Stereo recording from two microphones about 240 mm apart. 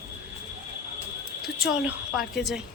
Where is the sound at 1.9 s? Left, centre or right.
Centre.